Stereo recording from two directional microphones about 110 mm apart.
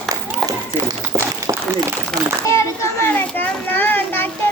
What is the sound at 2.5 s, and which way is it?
A child's voice, 25° left (ahead or behind).